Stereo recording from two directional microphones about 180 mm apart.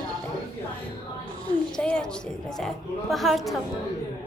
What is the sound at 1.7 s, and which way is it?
A woman's voice, 5° left (ahead or behind).